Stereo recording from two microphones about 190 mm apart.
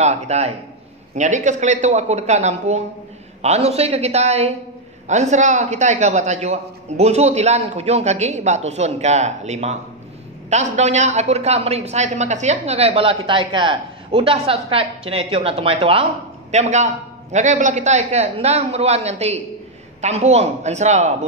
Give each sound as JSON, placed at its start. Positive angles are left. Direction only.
{"t": 0.0, "sound": "a woman's voice", "side_deg": -35}